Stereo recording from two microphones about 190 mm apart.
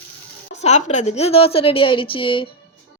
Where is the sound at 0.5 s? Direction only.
35° left (ahead or behind).